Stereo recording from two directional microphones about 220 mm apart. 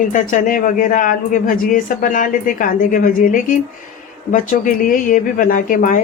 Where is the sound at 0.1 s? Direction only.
35° left (ahead or behind).